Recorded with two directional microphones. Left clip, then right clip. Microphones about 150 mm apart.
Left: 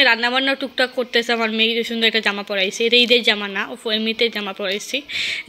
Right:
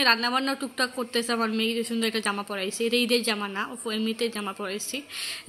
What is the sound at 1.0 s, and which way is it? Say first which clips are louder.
A woman's voice: left 8 dB; 15° left (ahead or behind).